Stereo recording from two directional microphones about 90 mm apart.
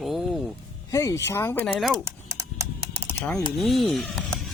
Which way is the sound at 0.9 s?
35° left (ahead or behind).